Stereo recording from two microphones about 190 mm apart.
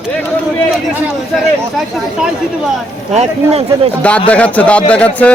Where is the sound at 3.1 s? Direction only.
35° right (ahead or behind).